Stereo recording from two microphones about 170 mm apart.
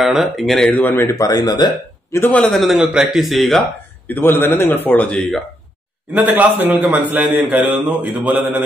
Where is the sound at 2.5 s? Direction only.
Centre (ahead or behind).